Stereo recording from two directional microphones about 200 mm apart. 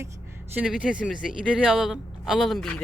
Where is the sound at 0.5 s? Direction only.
5° right (ahead or behind).